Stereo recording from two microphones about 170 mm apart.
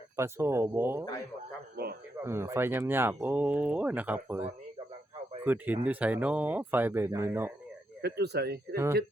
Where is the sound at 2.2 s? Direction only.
15° right (ahead or behind).